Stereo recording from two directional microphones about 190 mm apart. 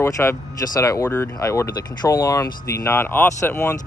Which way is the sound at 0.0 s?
15° left (ahead or behind).